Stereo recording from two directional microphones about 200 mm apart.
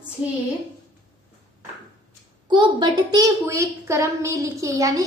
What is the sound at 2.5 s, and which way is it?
A woman's voice, 20° right (ahead or behind).